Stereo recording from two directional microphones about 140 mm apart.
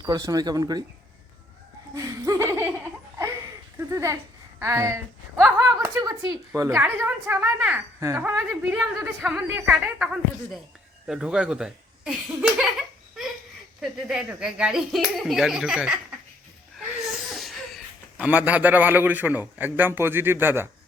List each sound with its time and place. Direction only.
0.0 s speech: 25° right (ahead or behind)
2.0 s laughter: 20° right (ahead or behind)
3.8 s a woman's voice: 20° right (ahead or behind)
6.8 s a man's voice: 15° right (ahead or behind)
9.2 s speech: 5° right (ahead or behind)
9.5 s a man's voice: 15° right (ahead or behind)
13.2 s a sound: centre (ahead or behind)
13.8 s speech: 5° right (ahead or behind)
17.1 s laughter: centre (ahead or behind)
18.2 s a man's voice: 10° right (ahead or behind)